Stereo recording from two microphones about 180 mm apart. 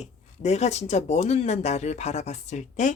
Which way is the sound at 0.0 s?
35° left (ahead or behind).